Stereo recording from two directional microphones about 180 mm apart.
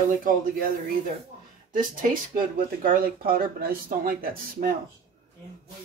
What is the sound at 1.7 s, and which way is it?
Speech, 50° right (ahead or behind).